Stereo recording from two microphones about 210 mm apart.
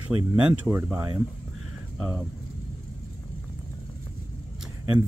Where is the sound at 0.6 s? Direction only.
10° right (ahead or behind).